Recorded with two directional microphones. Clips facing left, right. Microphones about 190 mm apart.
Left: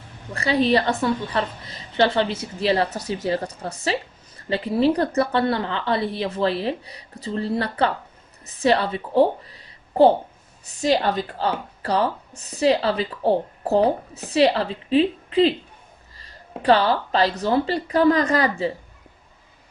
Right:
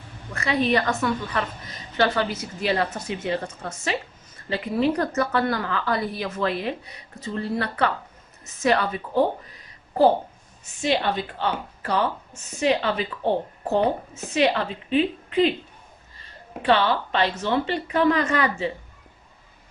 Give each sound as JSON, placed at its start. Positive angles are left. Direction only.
{"t": 0.3, "sound": "a woman's voice", "side_deg": 35}